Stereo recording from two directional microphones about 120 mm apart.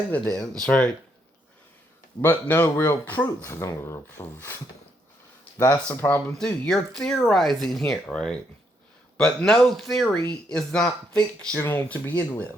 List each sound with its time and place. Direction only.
0.1 s speech: 5° left (ahead or behind)
2.2 s speech: 15° left (ahead or behind)